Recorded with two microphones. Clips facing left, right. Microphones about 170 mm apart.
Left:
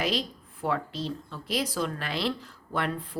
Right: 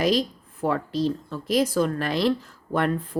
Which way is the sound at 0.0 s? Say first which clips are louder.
Right 7 dB; 40° right (ahead or behind).